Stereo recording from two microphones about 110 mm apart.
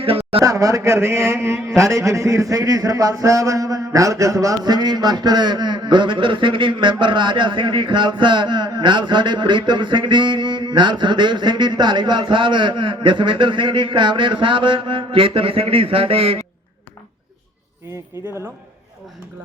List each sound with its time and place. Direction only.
0.0 s speech: 60° right (ahead or behind)
0.4 s a man's voice: 30° right (ahead or behind); by 16.4 s 60° right (ahead or behind)